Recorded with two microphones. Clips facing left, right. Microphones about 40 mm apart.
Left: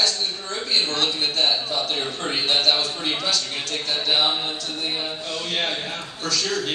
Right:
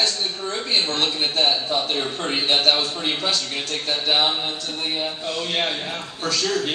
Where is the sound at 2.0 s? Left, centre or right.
Centre.